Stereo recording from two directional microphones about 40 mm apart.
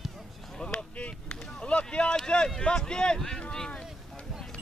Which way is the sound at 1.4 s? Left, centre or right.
Left.